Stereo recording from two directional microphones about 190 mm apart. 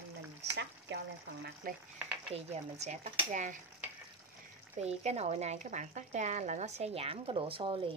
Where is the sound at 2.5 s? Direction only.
35° right (ahead or behind).